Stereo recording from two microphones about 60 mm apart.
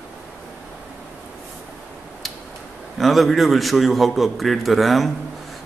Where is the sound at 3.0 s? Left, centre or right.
Centre.